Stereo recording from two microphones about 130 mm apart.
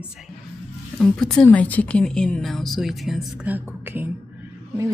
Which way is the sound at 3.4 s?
15° right (ahead or behind).